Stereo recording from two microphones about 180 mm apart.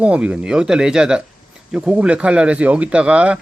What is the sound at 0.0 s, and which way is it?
Speech, 5° right (ahead or behind).